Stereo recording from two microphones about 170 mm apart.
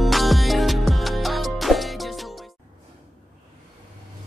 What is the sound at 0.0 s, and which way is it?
Music, centre (ahead or behind).